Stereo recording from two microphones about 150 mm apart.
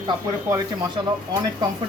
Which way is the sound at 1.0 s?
30° right (ahead or behind).